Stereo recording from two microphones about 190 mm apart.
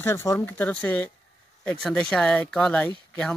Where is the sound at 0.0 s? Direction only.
15° left (ahead or behind).